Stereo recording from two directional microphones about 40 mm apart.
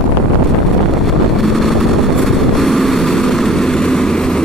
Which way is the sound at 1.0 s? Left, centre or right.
Centre.